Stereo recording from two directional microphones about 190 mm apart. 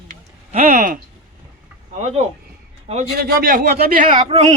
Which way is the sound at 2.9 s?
35° right (ahead or behind).